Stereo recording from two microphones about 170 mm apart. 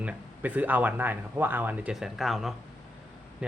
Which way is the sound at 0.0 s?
10° right (ahead or behind).